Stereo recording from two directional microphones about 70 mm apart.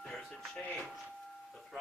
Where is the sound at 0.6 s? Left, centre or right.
Centre.